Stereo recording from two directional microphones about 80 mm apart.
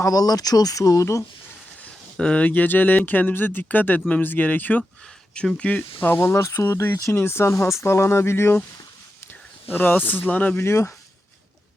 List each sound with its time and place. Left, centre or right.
0.0 s speech: left
1.8 s speech: centre
6.3 s speech: left
9.6 s speech: left
10.6 s speech: left